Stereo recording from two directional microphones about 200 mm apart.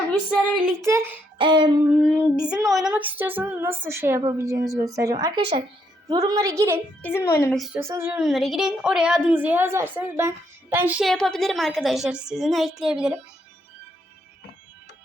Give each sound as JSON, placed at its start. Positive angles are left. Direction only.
{"t": 0.9, "sound": "female singing", "side_deg": -10}
{"t": 1.4, "sound": "music", "side_deg": -25}
{"t": 1.8, "sound": "female singing", "side_deg": -5}
{"t": 7.0, "sound": "a woman's voice", "side_deg": 15}
{"t": 7.5, "sound": "a woman's voice", "side_deg": 0}
{"t": 7.8, "sound": "a woman's voice", "side_deg": -15}